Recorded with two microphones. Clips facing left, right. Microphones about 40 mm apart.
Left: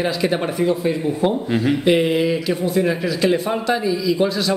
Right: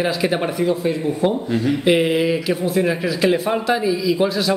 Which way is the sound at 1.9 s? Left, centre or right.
Centre.